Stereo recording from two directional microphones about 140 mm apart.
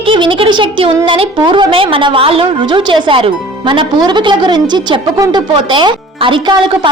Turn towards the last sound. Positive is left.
turn(degrees=-35)  # may be behind; listen again after turning